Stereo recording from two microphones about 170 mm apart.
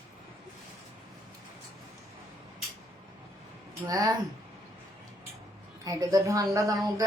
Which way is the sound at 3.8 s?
20° right (ahead or behind).